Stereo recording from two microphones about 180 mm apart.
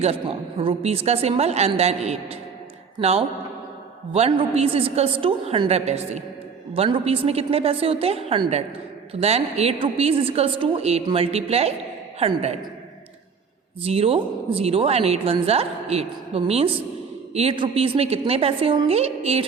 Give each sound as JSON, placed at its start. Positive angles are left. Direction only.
{"t": 0.6, "sound": "a woman's voice", "side_deg": -35}
{"t": 13.8, "sound": "a woman's voice", "side_deg": -35}